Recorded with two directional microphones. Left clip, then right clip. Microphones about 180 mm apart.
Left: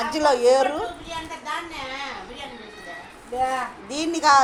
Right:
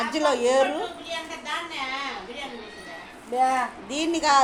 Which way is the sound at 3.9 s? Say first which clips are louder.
Left 5 dB; 10° right (ahead or behind).